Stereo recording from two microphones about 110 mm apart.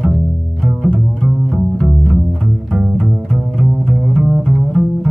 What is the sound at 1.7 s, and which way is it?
Music, 5° left (ahead or behind).